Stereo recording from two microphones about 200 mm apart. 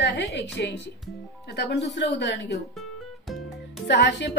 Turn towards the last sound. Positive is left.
turn(degrees=55)  # may be behind; listen again after turning